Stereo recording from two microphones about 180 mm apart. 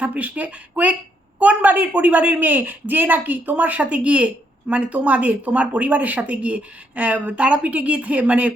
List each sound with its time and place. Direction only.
0.0 s speech: 10° right (ahead or behind)